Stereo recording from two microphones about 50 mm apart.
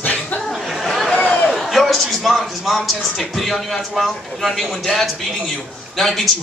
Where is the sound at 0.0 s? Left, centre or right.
Left.